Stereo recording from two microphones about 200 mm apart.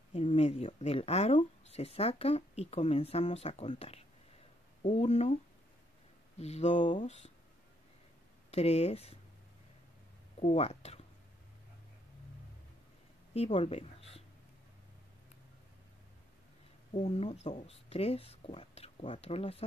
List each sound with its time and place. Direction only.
0.1 s speech: 30° left (ahead or behind)
6.3 s speech: 35° left (ahead or behind)
8.5 s speech: 30° left (ahead or behind)
10.4 s speech: 30° left (ahead or behind)
13.3 s speech: 30° left (ahead or behind)
16.9 s speech: 30° left (ahead or behind)